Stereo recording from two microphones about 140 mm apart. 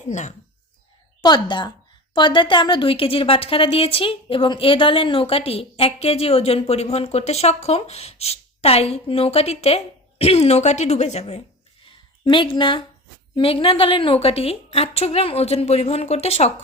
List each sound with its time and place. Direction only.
0.1 s speech: 60° left (ahead or behind)
1.2 s a woman's voice: 30° left (ahead or behind); by 11.4 s 50° left (ahead or behind)
12.2 s a woman's voice: 35° left (ahead or behind)